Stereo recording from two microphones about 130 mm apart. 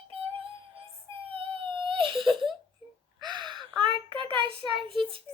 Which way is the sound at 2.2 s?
Centre (ahead or behind).